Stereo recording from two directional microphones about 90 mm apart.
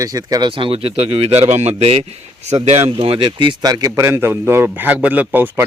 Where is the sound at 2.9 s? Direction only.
85° right.